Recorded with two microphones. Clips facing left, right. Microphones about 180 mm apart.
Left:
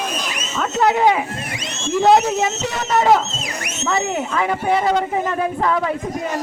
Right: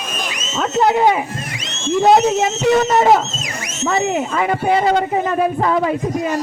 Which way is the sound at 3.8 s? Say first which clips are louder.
Right 3 dB; 15° right (ahead or behind).